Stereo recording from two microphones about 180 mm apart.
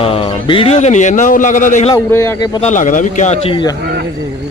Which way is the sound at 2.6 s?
45° left (ahead or behind).